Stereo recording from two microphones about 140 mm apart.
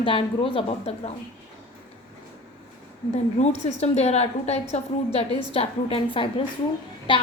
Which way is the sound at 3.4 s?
50° left (ahead or behind).